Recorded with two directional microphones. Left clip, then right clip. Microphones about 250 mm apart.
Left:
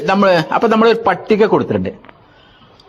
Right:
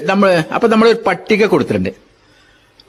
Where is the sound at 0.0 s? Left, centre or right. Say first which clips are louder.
Even; centre.